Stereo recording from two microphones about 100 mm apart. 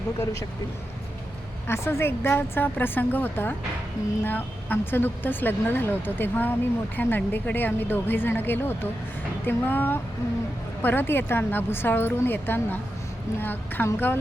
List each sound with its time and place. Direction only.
1.6 s speech: 25° left (ahead or behind)